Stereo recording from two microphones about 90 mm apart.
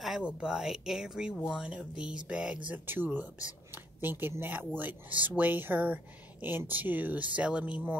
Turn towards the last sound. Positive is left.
turn(degrees=-15)  # may be behind; listen again after turning